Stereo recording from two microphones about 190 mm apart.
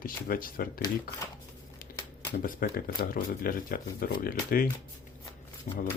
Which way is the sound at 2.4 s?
50° left (ahead or behind).